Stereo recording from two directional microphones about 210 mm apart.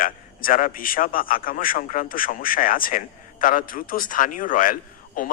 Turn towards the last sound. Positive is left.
turn(degrees=40)  # may be behind; listen again after turning